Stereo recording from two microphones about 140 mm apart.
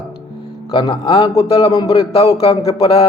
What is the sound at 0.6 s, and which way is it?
Speech, 35° left (ahead or behind).